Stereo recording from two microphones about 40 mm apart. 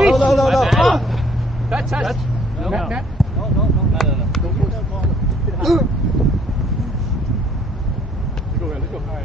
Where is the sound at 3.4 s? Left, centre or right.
Centre.